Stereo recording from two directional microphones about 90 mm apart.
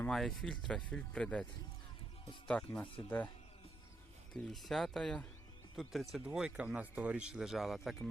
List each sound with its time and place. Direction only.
0.1 s speech: 5° left (ahead or behind)
2.5 s speech: 10° left (ahead or behind)
2.8 s speech: 80° left
4.4 s speech: centre (ahead or behind)